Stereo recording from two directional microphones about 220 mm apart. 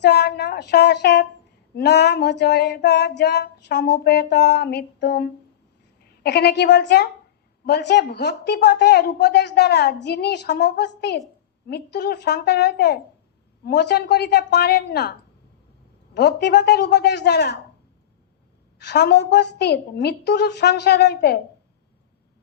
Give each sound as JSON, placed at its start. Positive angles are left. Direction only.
{"t": 0.0, "sound": "a sound", "side_deg": 50}
{"t": 1.7, "sound": "a woman's voice", "side_deg": 50}
{"t": 16.1, "sound": "speech", "side_deg": 50}
{"t": 18.8, "sound": "speech", "side_deg": 50}